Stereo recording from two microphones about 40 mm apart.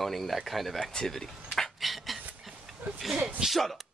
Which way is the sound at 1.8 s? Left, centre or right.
Centre.